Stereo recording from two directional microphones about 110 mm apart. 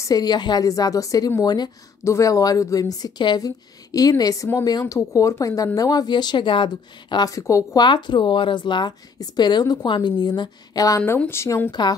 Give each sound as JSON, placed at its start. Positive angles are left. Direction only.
{"t": 0.0, "sound": "a woman's voice", "side_deg": 35}
{"t": 7.8, "sound": "a woman's voice", "side_deg": 45}
{"t": 11.0, "sound": "speech", "side_deg": 20}